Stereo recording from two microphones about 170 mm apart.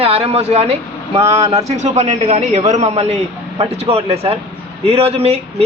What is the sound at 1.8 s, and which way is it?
A man's voice, 45° right (ahead or behind).